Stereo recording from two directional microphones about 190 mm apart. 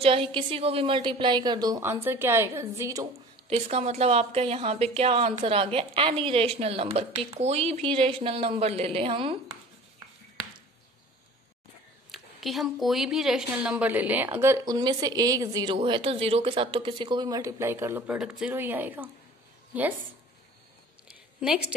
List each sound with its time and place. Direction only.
0.0 s a woman's voice: 30° right (ahead or behind)
3.4 s a woman's voice: 30° right (ahead or behind)
12.1 s a woman's voice: centre (ahead or behind)
21.1 s a sound: 5° right (ahead or behind)